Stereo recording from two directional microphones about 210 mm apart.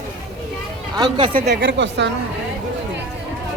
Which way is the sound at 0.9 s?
20° right (ahead or behind).